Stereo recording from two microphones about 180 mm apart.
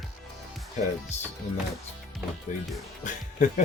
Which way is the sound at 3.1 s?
45° left (ahead or behind).